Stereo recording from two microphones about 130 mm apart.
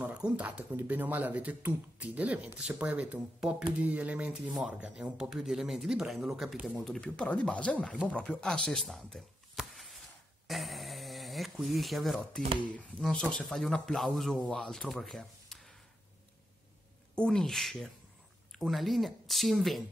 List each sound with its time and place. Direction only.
0.0 s speech: 10° right (ahead or behind)
6.8 s speech: 5° left (ahead or behind)
8.6 s a sound: centre (ahead or behind)
10.4 s speech: centre (ahead or behind)
17.1 s speech: 5° left (ahead or behind)